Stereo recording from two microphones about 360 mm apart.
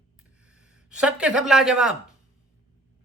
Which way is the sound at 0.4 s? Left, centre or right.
Centre.